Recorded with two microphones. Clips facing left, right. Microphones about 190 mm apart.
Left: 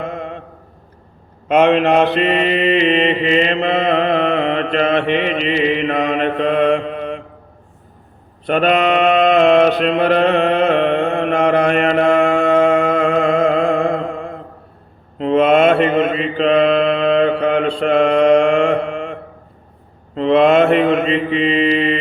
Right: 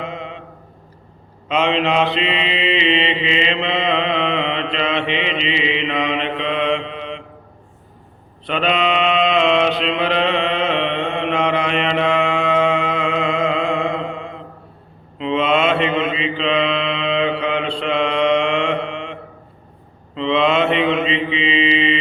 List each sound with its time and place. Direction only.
0.0 s mantra: 50° left (ahead or behind)
1.5 s mantra: 55° left (ahead or behind)
8.4 s mantra: 50° left (ahead or behind)